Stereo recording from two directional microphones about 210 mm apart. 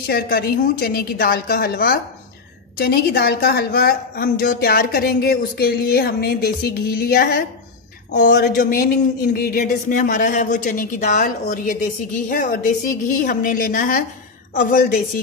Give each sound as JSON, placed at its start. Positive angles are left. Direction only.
{"t": 0.0, "sound": "a woman's voice", "side_deg": 45}